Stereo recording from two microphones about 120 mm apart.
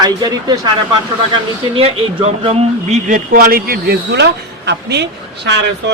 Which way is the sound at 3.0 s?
90° right.